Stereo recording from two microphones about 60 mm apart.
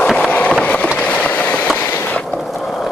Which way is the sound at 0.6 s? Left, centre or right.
Left.